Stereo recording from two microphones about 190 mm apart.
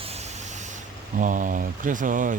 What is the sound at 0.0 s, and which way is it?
Vehicle, 35° right (ahead or behind).